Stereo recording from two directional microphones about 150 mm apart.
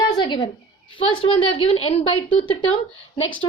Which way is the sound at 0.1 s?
25° left (ahead or behind).